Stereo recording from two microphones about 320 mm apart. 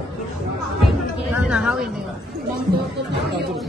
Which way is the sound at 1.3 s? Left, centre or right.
Centre.